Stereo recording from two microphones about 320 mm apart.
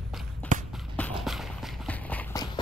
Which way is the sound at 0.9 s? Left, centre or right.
Centre.